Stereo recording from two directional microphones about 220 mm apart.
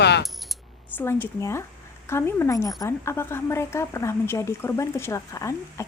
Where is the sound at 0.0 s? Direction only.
50° left (ahead or behind).